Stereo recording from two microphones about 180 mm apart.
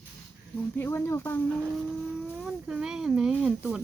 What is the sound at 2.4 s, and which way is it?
Speech, 5° right (ahead or behind).